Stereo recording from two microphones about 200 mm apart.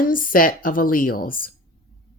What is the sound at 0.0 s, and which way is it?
A woman's voice, 45° left (ahead or behind).